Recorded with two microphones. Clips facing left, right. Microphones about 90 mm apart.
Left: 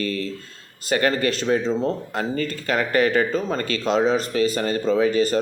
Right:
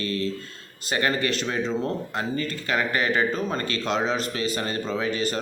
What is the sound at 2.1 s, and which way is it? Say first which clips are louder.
Speech: left 3 dB; 40° left (ahead or behind).